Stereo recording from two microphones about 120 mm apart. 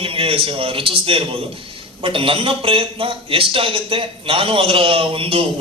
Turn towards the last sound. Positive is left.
turn(degrees=-50)  # may be behind; listen again after turning